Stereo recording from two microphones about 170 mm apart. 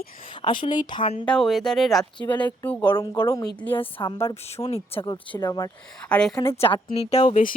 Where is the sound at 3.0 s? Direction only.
25° left (ahead or behind).